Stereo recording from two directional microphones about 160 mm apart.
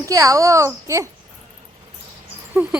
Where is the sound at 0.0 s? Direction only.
20° right (ahead or behind).